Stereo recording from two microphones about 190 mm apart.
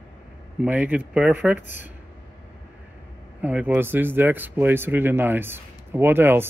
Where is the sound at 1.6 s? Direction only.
40° left (ahead or behind).